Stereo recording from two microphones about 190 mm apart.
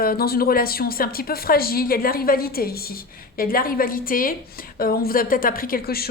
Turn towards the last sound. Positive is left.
turn(degrees=55)  # may be behind; listen again after turning